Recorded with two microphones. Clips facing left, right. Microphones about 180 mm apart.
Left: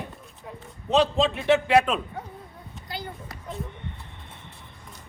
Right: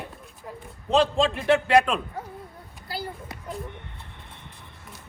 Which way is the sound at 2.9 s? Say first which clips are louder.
Right 2 dB; 5° right (ahead or behind).